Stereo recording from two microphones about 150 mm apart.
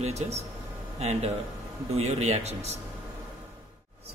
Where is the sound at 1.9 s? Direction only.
45° right (ahead or behind).